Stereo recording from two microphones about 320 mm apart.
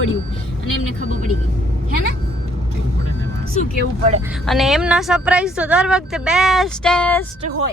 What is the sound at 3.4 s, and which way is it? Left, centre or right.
Speech, right.